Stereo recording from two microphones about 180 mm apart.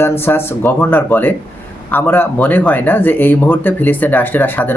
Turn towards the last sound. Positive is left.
turn(degrees=10)  # may be behind; listen again after turning